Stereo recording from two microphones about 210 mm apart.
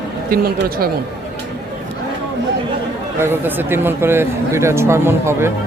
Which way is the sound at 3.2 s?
10° right (ahead or behind).